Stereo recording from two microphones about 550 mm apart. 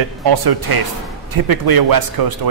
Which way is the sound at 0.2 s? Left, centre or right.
Right.